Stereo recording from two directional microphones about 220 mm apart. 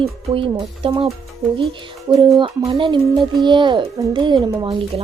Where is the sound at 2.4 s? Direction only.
25° right (ahead or behind).